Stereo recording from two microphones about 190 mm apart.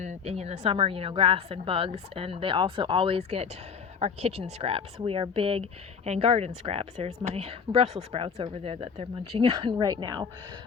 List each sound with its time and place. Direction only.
0.0 s a woman's voice: 35° right (ahead or behind)